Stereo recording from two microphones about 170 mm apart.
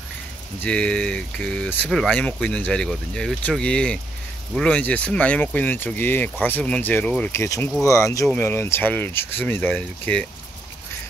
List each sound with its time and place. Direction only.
0.6 s speech: 5° left (ahead or behind)